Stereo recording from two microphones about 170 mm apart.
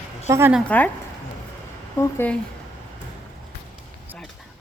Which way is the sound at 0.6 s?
10° left (ahead or behind).